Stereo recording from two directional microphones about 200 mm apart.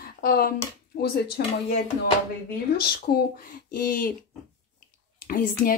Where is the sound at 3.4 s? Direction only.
45° left (ahead or behind).